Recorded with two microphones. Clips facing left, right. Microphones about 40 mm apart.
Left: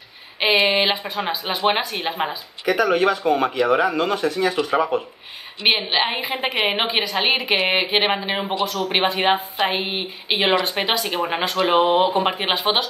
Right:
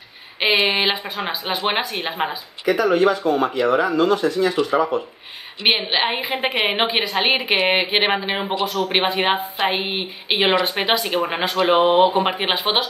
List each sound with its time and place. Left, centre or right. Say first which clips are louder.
0.7 s a woman's voice: left 1 dB; centre
2.6 s speech: right 1 dB; left
5.6 s a woman's voice: even; centre